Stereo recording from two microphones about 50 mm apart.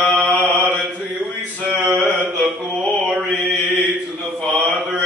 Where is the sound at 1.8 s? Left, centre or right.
Centre.